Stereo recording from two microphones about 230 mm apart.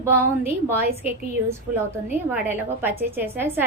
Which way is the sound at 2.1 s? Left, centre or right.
Centre.